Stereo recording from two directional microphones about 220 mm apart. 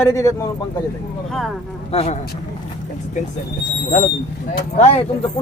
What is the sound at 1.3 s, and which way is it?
Speech, centre (ahead or behind).